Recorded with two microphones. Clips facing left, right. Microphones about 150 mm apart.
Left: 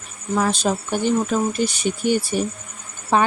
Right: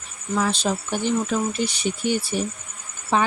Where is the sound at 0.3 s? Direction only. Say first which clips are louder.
Left 3 dB; 45° left (ahead or behind).